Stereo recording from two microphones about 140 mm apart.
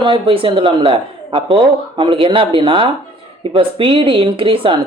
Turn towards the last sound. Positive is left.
turn(degrees=-40)  # may be behind; listen again after turning